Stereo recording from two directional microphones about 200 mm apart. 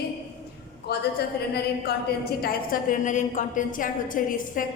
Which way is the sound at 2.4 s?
40° left (ahead or behind).